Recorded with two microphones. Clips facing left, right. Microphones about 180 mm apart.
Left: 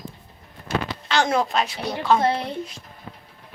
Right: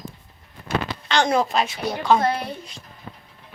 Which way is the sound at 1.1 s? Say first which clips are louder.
Right 1 dB; 5° left (ahead or behind).